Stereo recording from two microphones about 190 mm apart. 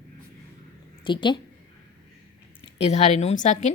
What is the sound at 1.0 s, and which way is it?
Speech, 25° left (ahead or behind).